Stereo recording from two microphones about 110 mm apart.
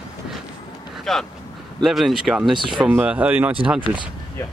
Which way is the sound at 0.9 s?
5° left (ahead or behind).